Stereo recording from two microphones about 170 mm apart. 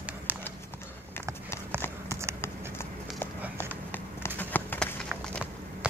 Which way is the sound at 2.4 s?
15° left (ahead or behind).